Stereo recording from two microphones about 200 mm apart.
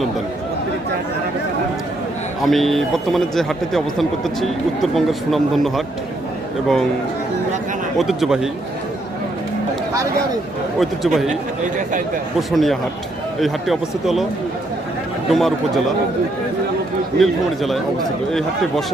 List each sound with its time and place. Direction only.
2.4 s speech: centre (ahead or behind)
7.9 s speech: centre (ahead or behind)
10.8 s speech: centre (ahead or behind)
12.4 s speech: centre (ahead or behind)
15.3 s speech: centre (ahead or behind)
17.2 s speech: centre (ahead or behind)